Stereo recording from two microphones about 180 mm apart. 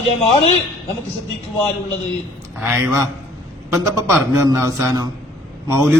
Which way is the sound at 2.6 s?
10° right (ahead or behind).